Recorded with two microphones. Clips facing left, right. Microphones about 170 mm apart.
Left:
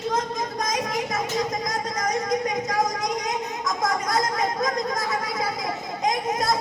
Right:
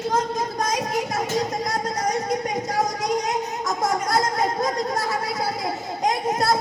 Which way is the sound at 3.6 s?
35° right (ahead or behind).